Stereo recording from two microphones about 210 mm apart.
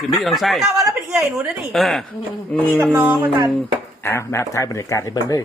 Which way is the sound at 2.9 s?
5° right (ahead or behind).